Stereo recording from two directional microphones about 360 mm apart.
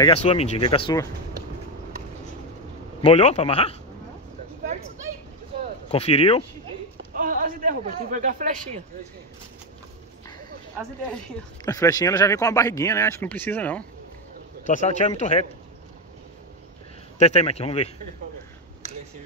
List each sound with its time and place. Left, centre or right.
0.0 s speech: centre
3.0 s speech: centre
5.9 s speech: centre
7.2 s a man's voice: right
11.6 s speech: centre
14.7 s speech: centre
17.2 s speech: centre